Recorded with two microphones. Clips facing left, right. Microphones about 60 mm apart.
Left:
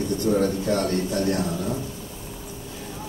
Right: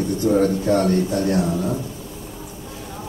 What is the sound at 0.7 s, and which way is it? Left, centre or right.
Speech, centre.